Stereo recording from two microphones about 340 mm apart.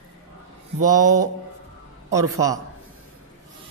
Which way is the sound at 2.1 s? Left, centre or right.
Centre.